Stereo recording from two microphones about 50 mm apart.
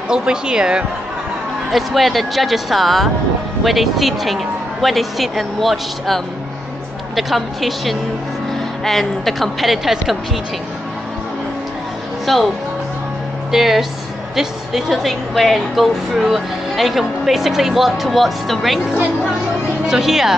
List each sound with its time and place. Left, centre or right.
0.1 s speech: centre
1.7 s a woman's voice: centre
12.3 s a woman's voice: centre
13.5 s a woman's voice: centre
19.9 s speech: centre